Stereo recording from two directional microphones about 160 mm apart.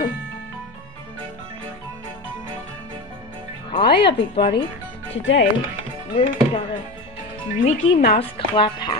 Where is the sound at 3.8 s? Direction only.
90° left.